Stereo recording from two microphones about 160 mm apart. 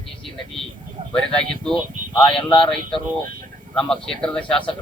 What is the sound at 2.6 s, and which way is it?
Speech, 5° left (ahead or behind).